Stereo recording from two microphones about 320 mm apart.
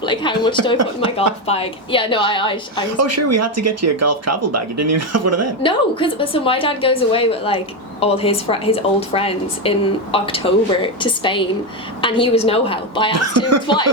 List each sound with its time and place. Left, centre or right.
0.0 s a woman's voice: centre
3.0 s speech: right
5.6 s a woman's voice: centre
13.1 s speech: right